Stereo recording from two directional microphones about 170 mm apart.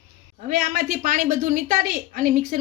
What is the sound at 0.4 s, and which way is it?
A woman's voice, 55° right (ahead or behind).